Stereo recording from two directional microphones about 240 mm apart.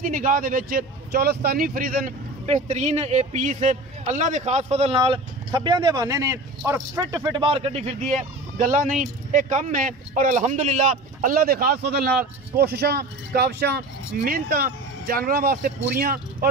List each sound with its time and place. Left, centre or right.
0.0 s speech: right